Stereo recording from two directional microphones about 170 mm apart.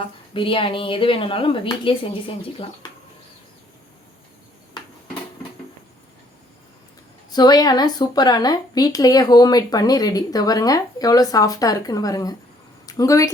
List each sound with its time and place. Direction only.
0.0 s a woman's voice: 30° left (ahead or behind)
7.3 s speech: 25° left (ahead or behind)